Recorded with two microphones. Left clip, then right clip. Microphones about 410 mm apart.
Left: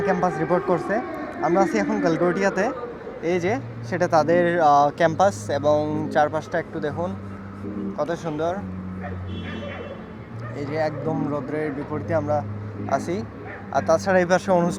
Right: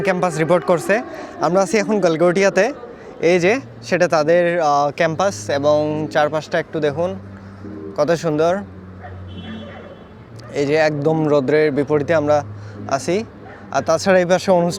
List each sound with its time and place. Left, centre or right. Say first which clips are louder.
0.0 s speech: right 4 dB; right
10.5 s speech: right 9 dB; right
12.9 s speech: right 5 dB; right